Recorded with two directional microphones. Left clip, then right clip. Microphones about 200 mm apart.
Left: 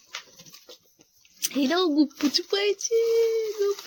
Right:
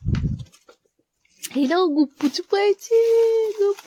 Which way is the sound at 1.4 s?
20° right (ahead or behind).